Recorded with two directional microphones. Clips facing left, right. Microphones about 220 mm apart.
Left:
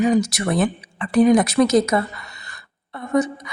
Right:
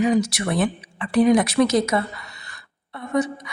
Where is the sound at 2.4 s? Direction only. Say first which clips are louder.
Left 2 dB; 45° left (ahead or behind).